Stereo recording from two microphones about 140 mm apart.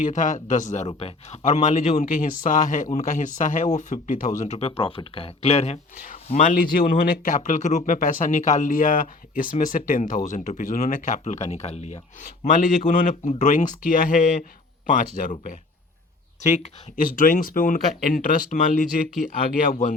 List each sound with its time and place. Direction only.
0.0 s speech: 65° left (ahead or behind)
0.9 s speech: 45° left (ahead or behind)
1.5 s speech: 60° left (ahead or behind)
4.4 s speech: 55° left (ahead or behind); by 15.3 s 70° left (ahead or behind)
17.0 s speech: 75° left (ahead or behind)